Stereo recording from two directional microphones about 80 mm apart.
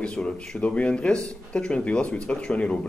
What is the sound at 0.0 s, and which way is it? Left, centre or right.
Speech, centre.